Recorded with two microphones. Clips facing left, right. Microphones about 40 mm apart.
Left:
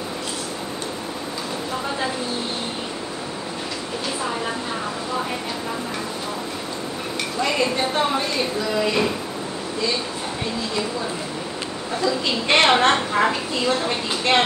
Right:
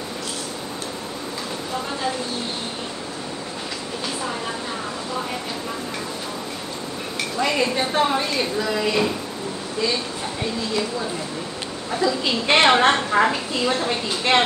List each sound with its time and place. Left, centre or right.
7.3 s a woman's voice: centre
11.9 s a woman's voice: centre